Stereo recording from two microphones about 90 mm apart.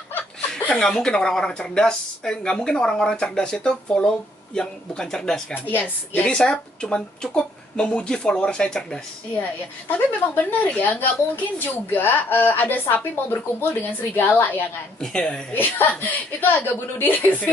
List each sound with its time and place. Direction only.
0.5 s a woman's voice: 10° left (ahead or behind)
5.5 s speech: 20° left (ahead or behind)
6.2 s a woman's voice: 10° left (ahead or behind)
9.8 s speech: 20° left (ahead or behind)
15.0 s a woman's voice: 10° left (ahead or behind)
15.5 s speech: 20° left (ahead or behind)